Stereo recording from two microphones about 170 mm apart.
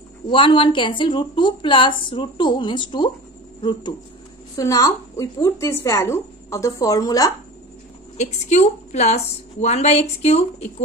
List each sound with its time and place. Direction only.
0.3 s a woman's voice: 30° left (ahead or behind)
4.6 s a woman's voice: 20° left (ahead or behind)
8.2 s a woman's voice: 45° left (ahead or behind)